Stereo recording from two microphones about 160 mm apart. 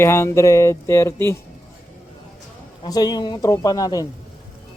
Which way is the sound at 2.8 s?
25° left (ahead or behind).